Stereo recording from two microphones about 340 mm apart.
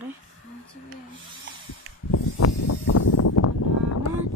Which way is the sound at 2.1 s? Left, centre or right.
Left.